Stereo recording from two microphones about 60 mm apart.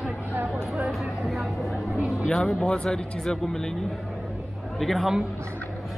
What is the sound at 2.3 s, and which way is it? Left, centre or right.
Speech, centre.